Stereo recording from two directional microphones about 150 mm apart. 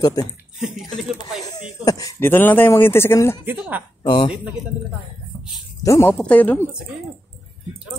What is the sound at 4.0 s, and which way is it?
Speech, 30° left (ahead or behind).